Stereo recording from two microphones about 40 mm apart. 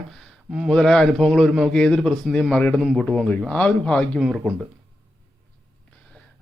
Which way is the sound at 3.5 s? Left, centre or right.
Left.